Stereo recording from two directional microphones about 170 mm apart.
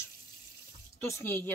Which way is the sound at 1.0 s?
15° left (ahead or behind).